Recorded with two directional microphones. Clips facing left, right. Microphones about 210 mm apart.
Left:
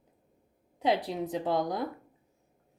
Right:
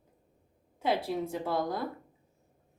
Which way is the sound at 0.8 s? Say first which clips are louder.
Left 1 dB; 15° left (ahead or behind).